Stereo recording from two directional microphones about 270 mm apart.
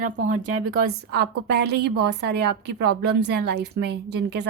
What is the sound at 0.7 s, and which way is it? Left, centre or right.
A woman's voice, right.